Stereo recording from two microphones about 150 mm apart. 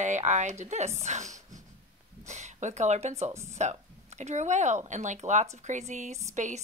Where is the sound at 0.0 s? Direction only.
50° right (ahead or behind).